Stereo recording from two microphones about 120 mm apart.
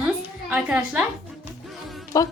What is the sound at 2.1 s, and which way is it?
Speech, 30° left (ahead or behind).